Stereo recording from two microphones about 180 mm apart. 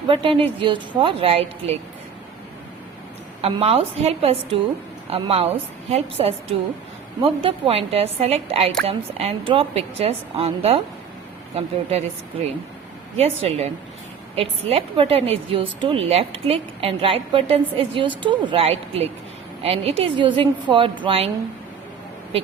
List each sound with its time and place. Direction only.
0.1 s a woman's voice: 30° right (ahead or behind)
3.4 s a woman's voice: 35° right (ahead or behind)